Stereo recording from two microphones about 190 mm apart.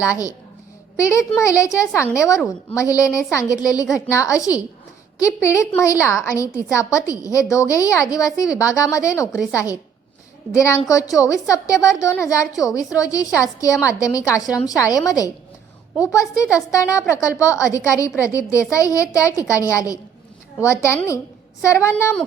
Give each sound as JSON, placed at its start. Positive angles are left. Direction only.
{"t": 0.0, "sound": "a woman's voice", "side_deg": 15}
{"t": 9.3, "sound": "a woman's voice", "side_deg": -5}
{"t": 10.5, "sound": "a woman's voice", "side_deg": 15}